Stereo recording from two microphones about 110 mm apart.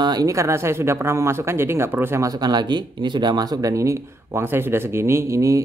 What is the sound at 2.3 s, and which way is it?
Speech, 40° right (ahead or behind).